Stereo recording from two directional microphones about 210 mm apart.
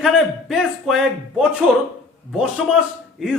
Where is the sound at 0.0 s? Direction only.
Centre (ahead or behind).